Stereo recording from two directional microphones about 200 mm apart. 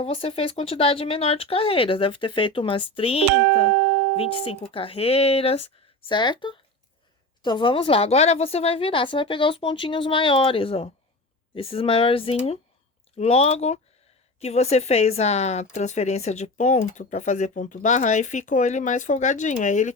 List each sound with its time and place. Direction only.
0.0 s a woman's voice: 30° left (ahead or behind)